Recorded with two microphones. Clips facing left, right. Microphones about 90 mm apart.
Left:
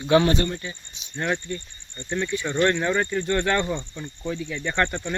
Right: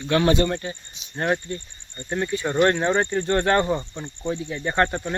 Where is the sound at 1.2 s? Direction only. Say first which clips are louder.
Right 3 dB; 30° right (ahead or behind).